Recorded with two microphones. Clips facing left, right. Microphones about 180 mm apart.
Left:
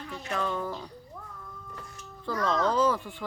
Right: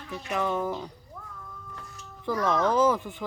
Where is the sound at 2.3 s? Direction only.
15° right (ahead or behind).